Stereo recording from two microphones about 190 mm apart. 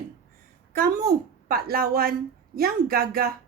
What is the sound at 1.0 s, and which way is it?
A woman's voice, 50° right (ahead or behind).